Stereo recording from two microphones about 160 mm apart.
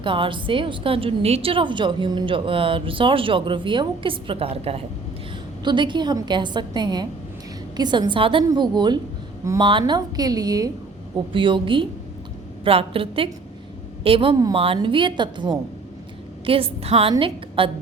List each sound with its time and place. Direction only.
0.0 s a woman's voice: 30° right (ahead or behind)